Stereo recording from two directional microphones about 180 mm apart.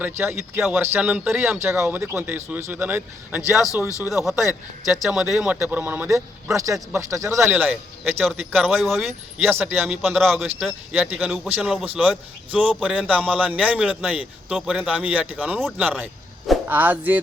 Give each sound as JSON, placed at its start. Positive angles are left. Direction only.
{"t": 0.0, "sound": "speech", "side_deg": -10}
{"t": 8.2, "sound": "speech", "side_deg": 0}
{"t": 9.5, "sound": "speech", "side_deg": -10}